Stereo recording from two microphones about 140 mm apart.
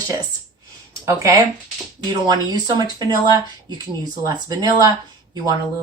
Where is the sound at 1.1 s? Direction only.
20° right (ahead or behind).